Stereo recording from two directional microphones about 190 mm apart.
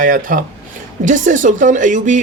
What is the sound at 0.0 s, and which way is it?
A man's voice, 45° right (ahead or behind).